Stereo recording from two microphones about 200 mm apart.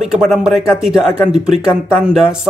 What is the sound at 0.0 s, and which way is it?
Speech, centre (ahead or behind).